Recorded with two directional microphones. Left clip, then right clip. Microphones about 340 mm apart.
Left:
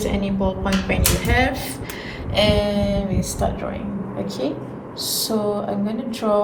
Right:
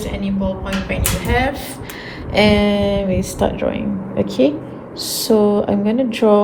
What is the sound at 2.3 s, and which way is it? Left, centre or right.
Speech, centre.